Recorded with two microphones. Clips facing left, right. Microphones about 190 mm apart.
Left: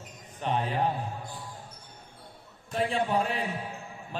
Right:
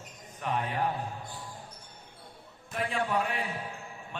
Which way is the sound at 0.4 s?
30° left (ahead or behind).